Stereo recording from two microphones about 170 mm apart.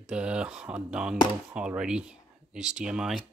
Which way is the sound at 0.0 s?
5° right (ahead or behind).